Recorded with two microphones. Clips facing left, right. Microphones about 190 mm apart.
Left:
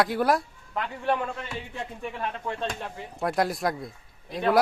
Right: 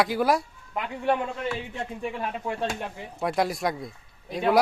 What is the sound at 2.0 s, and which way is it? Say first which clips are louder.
A woman's voice: right 1 dB; 10° right (ahead or behind).